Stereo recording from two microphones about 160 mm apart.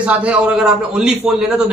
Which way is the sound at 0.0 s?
10° right (ahead or behind).